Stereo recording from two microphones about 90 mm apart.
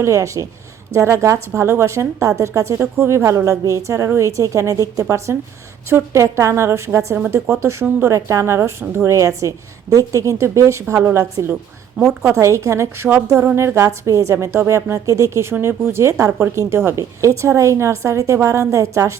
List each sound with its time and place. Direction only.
0.0 s a woman's voice: 35° right (ahead or behind)